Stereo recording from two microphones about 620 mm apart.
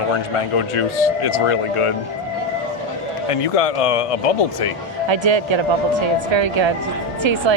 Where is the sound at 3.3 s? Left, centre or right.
Left.